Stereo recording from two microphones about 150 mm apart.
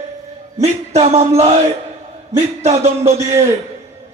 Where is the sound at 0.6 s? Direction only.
45° right (ahead or behind).